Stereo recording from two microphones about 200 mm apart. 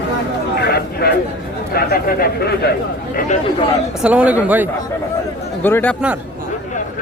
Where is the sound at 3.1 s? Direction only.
35° left (ahead or behind).